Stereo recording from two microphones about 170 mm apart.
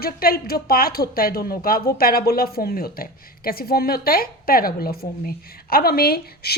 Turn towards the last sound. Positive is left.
turn(degrees=65)  # may be behind; listen again after turning